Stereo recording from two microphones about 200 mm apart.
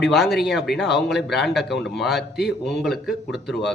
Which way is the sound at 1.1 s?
55° left (ahead or behind).